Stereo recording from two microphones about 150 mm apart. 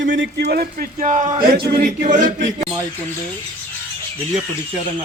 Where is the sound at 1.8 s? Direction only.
60° right (ahead or behind).